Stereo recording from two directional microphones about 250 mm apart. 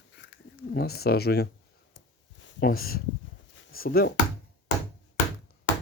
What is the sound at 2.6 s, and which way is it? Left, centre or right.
Speech, left.